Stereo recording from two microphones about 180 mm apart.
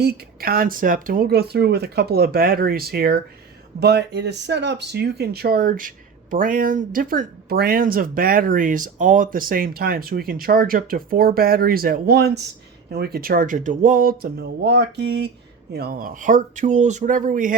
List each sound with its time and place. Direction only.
0.0 s speech: 60° right (ahead or behind)